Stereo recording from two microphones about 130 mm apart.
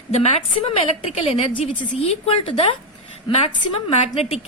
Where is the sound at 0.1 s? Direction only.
55° left (ahead or behind).